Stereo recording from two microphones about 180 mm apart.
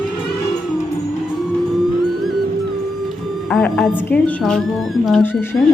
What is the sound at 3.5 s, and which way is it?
A woman's voice, 5° left (ahead or behind).